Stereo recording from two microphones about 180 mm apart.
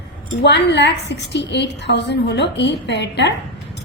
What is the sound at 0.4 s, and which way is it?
A woman's voice, 70° left (ahead or behind).